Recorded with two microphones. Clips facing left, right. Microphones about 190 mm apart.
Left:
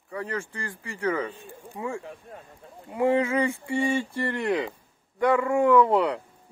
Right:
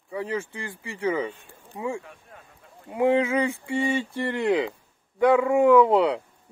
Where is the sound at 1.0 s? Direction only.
10° right (ahead or behind).